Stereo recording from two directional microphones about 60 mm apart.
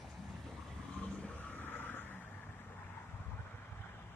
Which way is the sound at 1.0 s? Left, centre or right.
Left.